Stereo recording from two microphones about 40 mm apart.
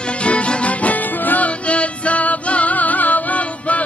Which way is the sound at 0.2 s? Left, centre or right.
Left.